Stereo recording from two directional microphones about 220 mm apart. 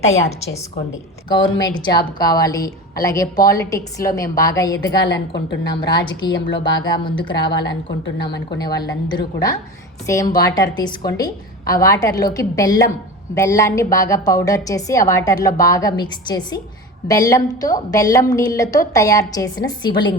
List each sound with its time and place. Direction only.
0.1 s a woman's voice: 30° left (ahead or behind)
1.3 s a woman's voice: 20° left (ahead or behind)
5.0 s a woman's voice: 50° left (ahead or behind)
5.8 s a woman's voice: 20° left (ahead or behind)